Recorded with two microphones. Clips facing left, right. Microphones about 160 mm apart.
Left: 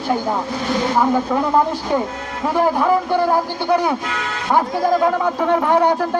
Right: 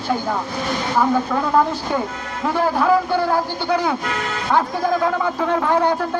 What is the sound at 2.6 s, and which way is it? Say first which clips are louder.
Speech: left 1 dB; 15° left (ahead or behind).